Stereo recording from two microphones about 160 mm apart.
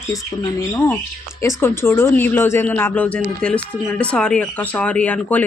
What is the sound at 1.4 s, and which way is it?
Speech, 15° left (ahead or behind).